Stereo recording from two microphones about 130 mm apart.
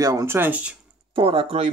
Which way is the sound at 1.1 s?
45° right (ahead or behind).